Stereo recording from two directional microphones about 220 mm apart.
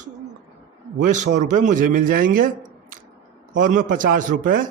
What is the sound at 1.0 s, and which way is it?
A man's voice, 35° right (ahead or behind).